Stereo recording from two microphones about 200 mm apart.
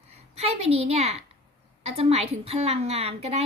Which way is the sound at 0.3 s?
30° right (ahead or behind).